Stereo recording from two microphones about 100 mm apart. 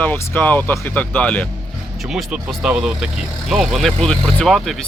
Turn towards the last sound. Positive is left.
turn(degrees=0)  # may be behind; listen again after turning